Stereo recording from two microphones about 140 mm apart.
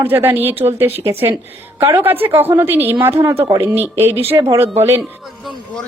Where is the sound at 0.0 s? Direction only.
15° right (ahead or behind).